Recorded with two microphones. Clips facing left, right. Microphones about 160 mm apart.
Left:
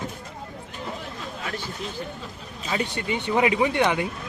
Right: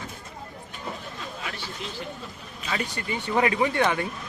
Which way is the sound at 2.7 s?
20° left (ahead or behind).